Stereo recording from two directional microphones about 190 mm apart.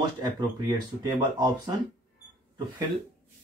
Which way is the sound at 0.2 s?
20° right (ahead or behind).